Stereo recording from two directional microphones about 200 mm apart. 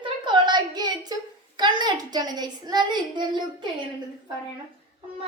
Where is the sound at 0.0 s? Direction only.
20° right (ahead or behind).